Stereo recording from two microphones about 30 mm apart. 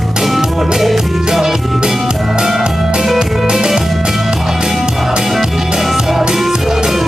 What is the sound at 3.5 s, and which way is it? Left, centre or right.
Music, centre.